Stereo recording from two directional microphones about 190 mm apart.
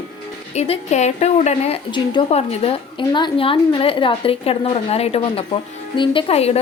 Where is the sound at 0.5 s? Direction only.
35° left (ahead or behind).